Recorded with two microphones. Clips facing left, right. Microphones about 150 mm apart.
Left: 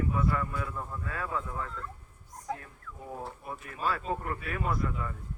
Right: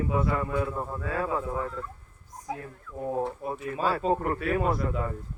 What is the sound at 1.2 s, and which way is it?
Speech, 35° right (ahead or behind).